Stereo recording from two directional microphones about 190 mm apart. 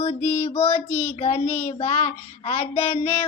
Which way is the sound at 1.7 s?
35° left (ahead or behind).